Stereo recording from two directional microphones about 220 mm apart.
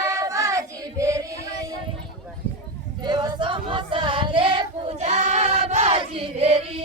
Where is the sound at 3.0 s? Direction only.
20° right (ahead or behind).